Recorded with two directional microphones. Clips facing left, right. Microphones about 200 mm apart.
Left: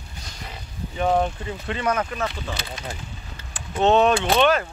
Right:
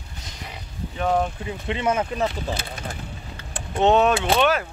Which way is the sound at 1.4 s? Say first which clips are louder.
Right 1 dB; 20° right (ahead or behind).